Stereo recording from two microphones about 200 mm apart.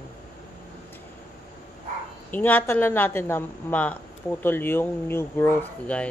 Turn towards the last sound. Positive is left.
turn(degrees=5)  # may be behind; listen again after turning